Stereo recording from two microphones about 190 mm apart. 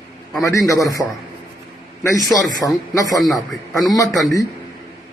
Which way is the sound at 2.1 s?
20° left (ahead or behind).